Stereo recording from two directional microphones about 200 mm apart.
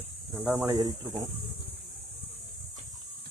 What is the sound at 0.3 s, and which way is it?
Speech, 5° right (ahead or behind).